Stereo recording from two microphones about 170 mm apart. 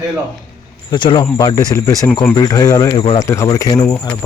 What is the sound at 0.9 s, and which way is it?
Speech, 30° left (ahead or behind).